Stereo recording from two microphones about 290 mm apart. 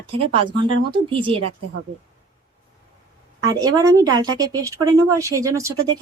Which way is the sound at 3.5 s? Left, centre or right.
Centre.